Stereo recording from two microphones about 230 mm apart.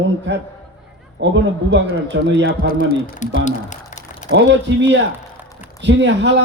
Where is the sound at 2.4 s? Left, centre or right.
Left.